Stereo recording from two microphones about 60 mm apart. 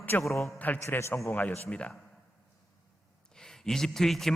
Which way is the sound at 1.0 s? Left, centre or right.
Left.